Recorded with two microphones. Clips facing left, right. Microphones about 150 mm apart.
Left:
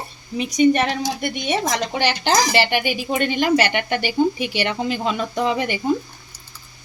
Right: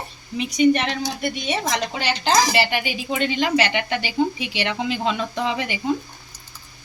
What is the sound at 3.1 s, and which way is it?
Speech, 50° left (ahead or behind).